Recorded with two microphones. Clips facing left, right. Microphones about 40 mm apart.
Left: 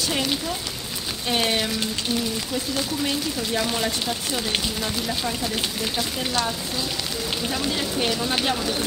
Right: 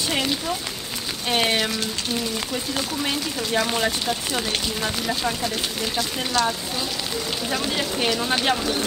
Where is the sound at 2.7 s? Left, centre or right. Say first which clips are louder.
Even; centre.